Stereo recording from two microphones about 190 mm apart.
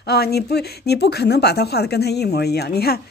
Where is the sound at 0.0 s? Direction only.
55° left (ahead or behind).